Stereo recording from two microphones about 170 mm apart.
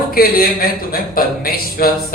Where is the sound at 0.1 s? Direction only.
60° left (ahead or behind).